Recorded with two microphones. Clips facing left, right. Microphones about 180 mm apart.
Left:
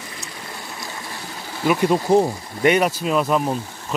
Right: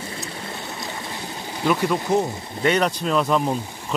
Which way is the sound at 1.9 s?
30° left (ahead or behind).